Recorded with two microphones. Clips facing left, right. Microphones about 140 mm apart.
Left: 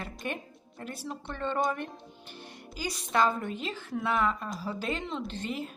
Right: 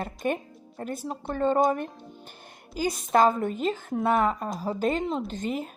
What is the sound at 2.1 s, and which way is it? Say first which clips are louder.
Music: left 1 dB; 45° right (ahead or behind).